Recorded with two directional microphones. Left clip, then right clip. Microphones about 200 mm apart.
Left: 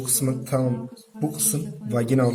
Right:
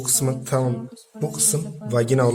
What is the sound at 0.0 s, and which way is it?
A man's voice, 50° right (ahead or behind).